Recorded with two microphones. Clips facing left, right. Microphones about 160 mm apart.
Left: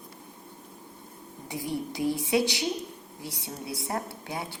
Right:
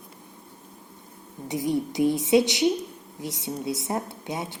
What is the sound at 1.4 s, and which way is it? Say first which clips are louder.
Speech: right 7 dB; 20° right (ahead or behind).